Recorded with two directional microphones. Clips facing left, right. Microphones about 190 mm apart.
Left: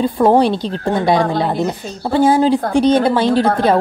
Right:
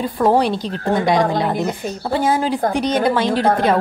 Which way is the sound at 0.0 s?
25° left (ahead or behind).